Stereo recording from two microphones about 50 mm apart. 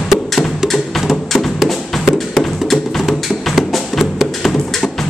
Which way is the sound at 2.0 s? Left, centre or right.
Centre.